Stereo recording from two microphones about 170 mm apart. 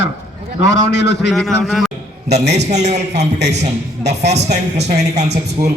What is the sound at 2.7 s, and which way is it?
A man's voice, 45° right (ahead or behind).